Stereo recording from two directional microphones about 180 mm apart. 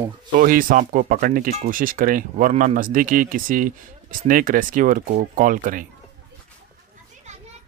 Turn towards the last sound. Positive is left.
turn(degrees=-50)  # may be behind; listen again after turning